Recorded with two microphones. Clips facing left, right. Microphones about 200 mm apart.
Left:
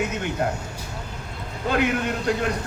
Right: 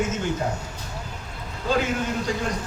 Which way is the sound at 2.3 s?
65° left (ahead or behind).